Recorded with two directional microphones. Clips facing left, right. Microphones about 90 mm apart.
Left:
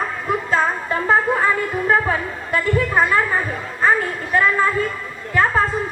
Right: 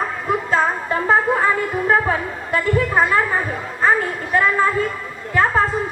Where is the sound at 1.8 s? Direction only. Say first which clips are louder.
Right 1 dB; 30° right (ahead or behind).